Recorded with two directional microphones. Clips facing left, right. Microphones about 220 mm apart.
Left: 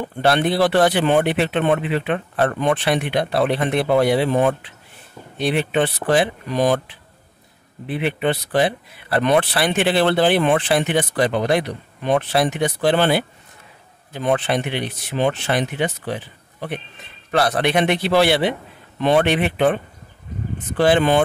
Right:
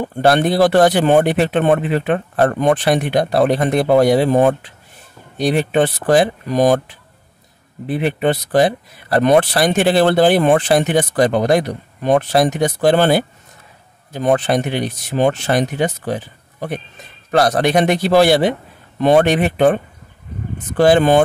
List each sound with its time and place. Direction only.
0.0 s speech: 45° right (ahead or behind)